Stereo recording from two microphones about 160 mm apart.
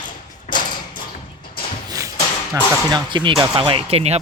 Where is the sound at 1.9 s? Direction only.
20° right (ahead or behind).